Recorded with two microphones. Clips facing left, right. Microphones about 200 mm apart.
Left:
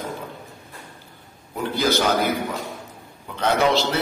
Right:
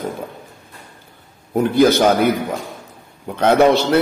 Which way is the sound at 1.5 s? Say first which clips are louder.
Right 9 dB; 55° right (ahead or behind).